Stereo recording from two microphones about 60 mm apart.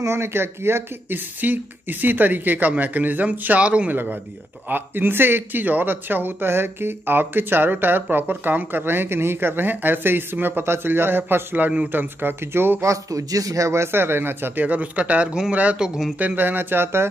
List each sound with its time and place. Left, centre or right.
0.0 s speech: right
3.9 s speech: right
12.8 s speech: right
13.7 s speech: right